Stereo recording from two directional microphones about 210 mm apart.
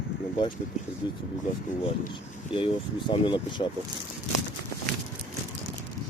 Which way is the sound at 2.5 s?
25° left (ahead or behind).